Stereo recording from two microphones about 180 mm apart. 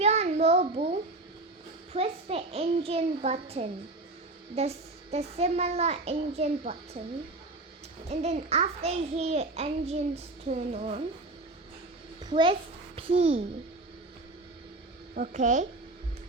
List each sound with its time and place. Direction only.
0.0 s a sound: 35° right (ahead or behind)
1.9 s a child's voice: 35° right (ahead or behind)
8.1 s a child's voice: 35° right (ahead or behind)
12.2 s a child's voice: 25° right (ahead or behind)
15.1 s a woman's voice: 45° right (ahead or behind)